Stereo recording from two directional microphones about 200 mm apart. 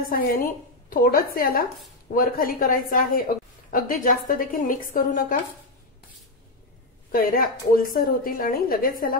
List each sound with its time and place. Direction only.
0.0 s a woman's voice: 45° left (ahead or behind)
3.3 s a sound: 45° left (ahead or behind)
3.7 s a woman's voice: 45° left (ahead or behind)
7.1 s a woman's voice: 45° left (ahead or behind)